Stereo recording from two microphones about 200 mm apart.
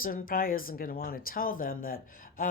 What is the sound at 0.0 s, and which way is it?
Speech, 45° left (ahead or behind).